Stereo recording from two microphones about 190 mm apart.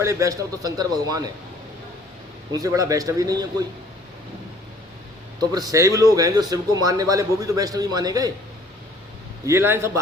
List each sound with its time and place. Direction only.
0.0 s a man's voice: 15° right (ahead or behind)
2.5 s a man's voice: 20° right (ahead or behind)
5.4 s speech: 20° right (ahead or behind)
9.5 s a man's voice: 15° right (ahead or behind)